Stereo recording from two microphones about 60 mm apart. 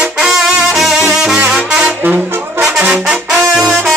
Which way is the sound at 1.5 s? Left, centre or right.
Centre.